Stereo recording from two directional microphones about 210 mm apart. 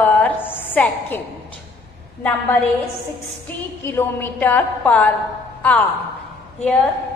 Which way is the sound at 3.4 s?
10° left (ahead or behind).